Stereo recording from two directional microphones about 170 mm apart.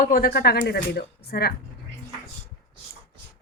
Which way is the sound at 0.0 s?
60° left (ahead or behind).